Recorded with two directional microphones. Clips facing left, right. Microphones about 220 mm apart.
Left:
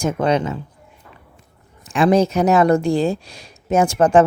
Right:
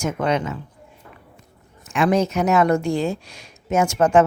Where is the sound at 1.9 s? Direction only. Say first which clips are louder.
Left 4 dB; 35° left (ahead or behind).